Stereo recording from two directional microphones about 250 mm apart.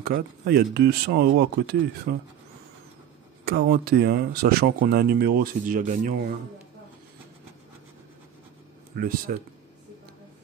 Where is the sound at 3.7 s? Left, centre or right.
Right.